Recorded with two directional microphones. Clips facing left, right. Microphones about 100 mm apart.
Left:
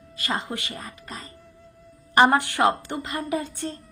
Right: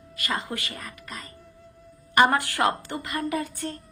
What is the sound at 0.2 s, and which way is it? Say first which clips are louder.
A woman's voice: left 1 dB; 25° left (ahead or behind).